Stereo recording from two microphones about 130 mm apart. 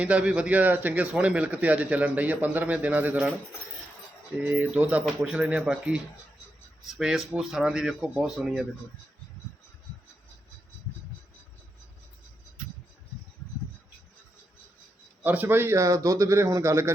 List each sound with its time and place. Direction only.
0.0 s a man's voice: 10° right (ahead or behind)
4.4 s a man's voice: 10° right (ahead or behind)
15.2 s a man's voice: 15° right (ahead or behind)